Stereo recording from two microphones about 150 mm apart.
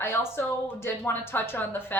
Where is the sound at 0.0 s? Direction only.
15° left (ahead or behind).